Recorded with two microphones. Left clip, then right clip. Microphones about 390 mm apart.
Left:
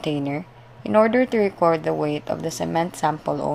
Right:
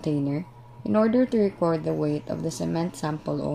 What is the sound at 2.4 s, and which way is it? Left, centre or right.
Speech, left.